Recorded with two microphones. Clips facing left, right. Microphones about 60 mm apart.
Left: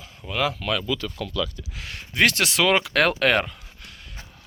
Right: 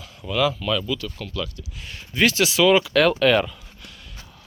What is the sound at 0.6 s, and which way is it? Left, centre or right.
Speech, left.